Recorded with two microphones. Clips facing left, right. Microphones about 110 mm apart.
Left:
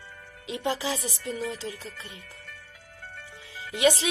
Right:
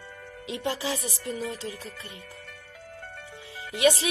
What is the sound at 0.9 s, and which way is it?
Music, 25° right (ahead or behind).